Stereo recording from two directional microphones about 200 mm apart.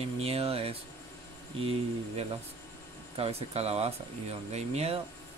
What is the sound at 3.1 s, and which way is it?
Speech, 30° right (ahead or behind).